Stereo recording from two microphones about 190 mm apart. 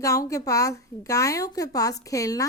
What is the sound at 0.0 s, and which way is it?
A woman's voice, 15° left (ahead or behind).